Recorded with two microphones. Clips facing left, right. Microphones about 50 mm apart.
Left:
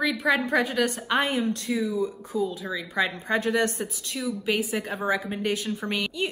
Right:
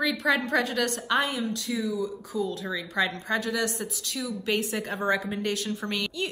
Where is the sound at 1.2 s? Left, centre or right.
Left.